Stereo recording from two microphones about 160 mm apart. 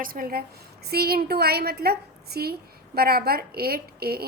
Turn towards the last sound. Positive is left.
turn(degrees=-75)  # may be behind; listen again after turning